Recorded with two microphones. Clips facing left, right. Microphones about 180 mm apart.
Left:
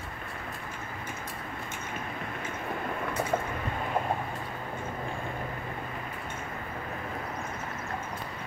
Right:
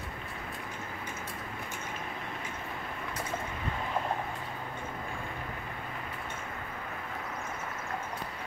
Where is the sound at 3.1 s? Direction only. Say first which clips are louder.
Left 8 dB; 55° left (ahead or behind).